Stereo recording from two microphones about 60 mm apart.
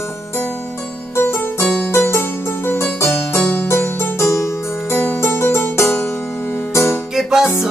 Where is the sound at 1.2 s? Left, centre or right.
Left.